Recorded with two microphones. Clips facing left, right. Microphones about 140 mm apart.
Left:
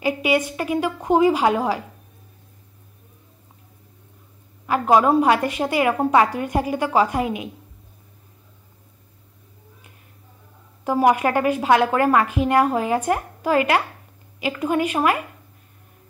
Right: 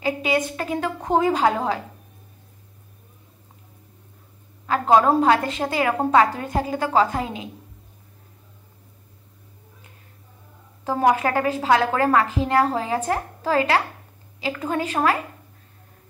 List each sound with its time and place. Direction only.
0.0 s a woman's voice: 15° left (ahead or behind)
4.6 s a woman's voice: 10° left (ahead or behind)
10.8 s a woman's voice: 15° left (ahead or behind)